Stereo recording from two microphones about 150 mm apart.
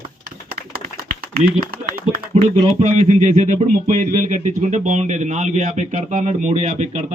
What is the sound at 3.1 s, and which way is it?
Speech, 55° right (ahead or behind).